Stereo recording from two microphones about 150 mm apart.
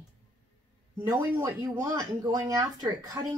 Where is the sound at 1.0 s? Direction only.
25° right (ahead or behind).